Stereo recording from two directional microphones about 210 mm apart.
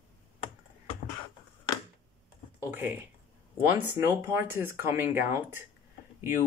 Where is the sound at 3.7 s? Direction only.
10° right (ahead or behind).